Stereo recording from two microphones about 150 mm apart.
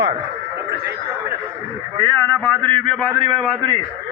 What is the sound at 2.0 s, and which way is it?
Speech, 15° left (ahead or behind).